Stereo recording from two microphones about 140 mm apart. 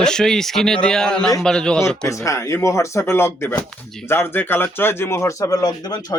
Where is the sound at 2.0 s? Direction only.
20° left (ahead or behind).